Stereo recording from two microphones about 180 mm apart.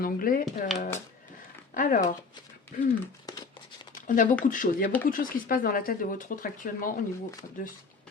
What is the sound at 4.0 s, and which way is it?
Speech, 45° left (ahead or behind).